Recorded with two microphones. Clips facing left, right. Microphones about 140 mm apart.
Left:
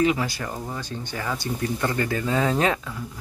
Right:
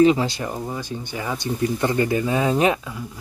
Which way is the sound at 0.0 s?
25° right (ahead or behind).